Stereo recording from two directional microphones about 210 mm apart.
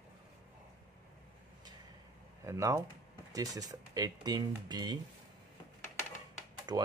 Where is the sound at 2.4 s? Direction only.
15° right (ahead or behind).